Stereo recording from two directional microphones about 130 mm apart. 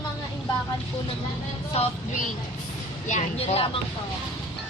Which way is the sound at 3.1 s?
60° left (ahead or behind).